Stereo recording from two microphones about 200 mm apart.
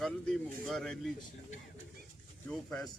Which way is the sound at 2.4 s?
5° left (ahead or behind).